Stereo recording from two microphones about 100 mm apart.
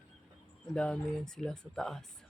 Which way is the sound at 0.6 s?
10° left (ahead or behind).